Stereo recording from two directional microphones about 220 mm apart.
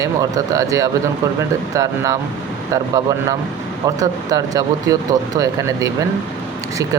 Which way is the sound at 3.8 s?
15° right (ahead or behind).